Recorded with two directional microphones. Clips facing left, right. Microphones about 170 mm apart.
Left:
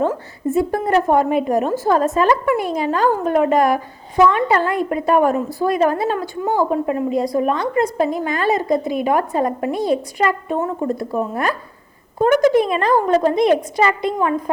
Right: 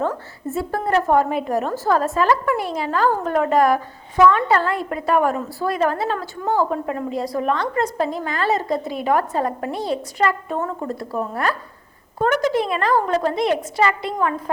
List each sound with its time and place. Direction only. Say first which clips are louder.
0.1 s a woman's voice: left 6 dB; 15° left (ahead or behind)